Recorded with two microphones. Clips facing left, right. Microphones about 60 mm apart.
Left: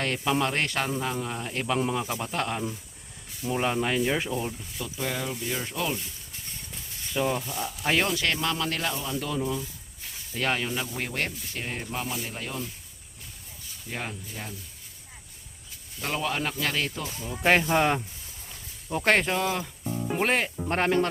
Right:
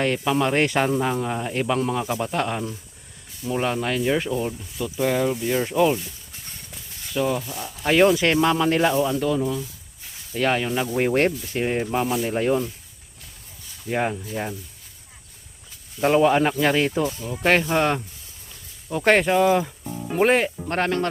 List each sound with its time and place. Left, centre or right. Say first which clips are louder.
0.0 s speech: right 5 dB; centre
0.5 s speech: right 8 dB; centre
7.1 s speech: right 4 dB; centre
8.0 s speech: right 10 dB; centre
9.2 s speech: right 7 dB; centre
10.9 s speech: right 11 dB; right
13.9 s speech: right 11 dB; right
16.0 s speech: right 12 dB; right
17.2 s speech: even; centre
18.9 s speech: right 5 dB; centre
20.7 s speech: right 1 dB; centre